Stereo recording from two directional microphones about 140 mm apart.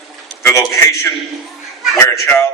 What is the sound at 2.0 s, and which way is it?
Speech, 15° left (ahead or behind).